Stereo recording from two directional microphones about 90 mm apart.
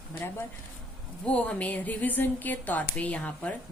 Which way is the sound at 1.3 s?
15° left (ahead or behind).